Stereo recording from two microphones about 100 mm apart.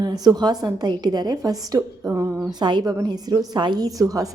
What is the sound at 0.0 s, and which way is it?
A woman's voice, 40° right (ahead or behind).